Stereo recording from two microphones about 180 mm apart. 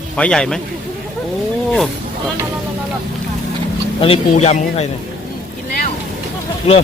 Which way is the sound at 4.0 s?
35° left (ahead or behind).